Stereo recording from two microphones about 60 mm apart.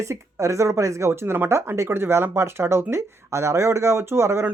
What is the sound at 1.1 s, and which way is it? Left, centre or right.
Speech, right.